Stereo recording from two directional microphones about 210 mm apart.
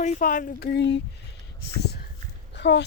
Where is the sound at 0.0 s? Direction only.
40° left (ahead or behind); by 1.0 s 55° left (ahead or behind).